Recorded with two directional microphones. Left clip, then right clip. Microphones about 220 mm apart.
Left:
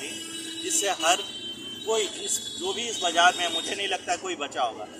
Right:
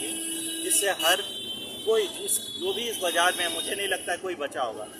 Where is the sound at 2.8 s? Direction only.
5° right (ahead or behind).